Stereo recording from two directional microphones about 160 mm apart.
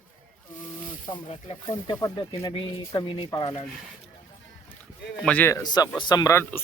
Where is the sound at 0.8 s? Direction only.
55° left (ahead or behind).